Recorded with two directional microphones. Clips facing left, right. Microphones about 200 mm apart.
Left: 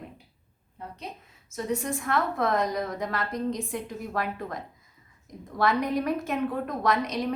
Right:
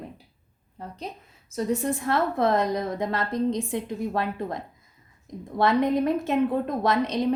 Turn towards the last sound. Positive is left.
turn(degrees=-25)  # may be behind; listen again after turning